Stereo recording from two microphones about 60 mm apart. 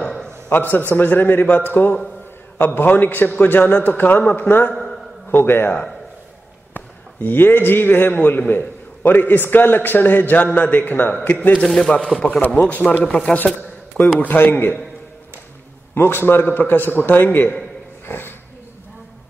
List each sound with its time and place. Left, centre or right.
0.0 s a sound: centre
0.5 s a man's voice: left
4.7 s a sound: centre
5.3 s a man's voice: left
7.2 s a man's voice: left
11.6 s speech: centre
11.9 s a man's voice: centre
12.5 s speech: left
13.6 s a sound: left
14.2 s a man's voice: left
15.9 s a man's voice: left
18.0 s dog: left